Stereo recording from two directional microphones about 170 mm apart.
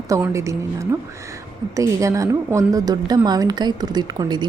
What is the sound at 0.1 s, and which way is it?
A woman's voice, 15° right (ahead or behind).